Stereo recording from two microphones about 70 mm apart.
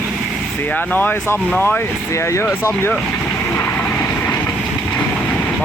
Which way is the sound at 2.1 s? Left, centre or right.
Left.